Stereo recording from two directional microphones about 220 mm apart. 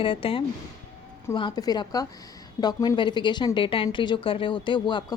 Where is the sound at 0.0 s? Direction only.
25° left (ahead or behind).